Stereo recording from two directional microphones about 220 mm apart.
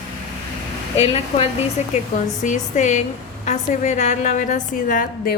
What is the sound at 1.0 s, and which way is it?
A woman's voice, 25° left (ahead or behind).